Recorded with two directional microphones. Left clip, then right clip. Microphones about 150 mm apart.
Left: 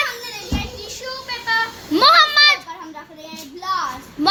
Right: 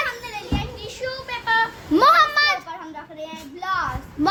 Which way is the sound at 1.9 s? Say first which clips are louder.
Left 3 dB; 10° right (ahead or behind).